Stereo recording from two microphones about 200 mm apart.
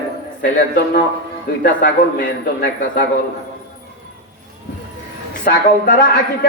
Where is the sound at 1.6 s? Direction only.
60° left (ahead or behind).